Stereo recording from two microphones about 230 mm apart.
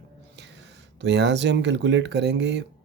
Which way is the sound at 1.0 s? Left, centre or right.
Right.